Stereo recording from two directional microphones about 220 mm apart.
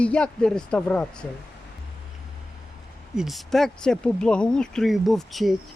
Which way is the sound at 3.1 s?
Centre (ahead or behind).